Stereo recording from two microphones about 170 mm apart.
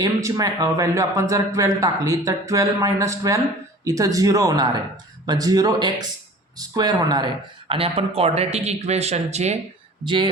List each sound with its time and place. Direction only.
0.0 s a man's voice: 20° right (ahead or behind); by 9.6 s 40° right (ahead or behind)
10.0 s a man's voice: 25° right (ahead or behind)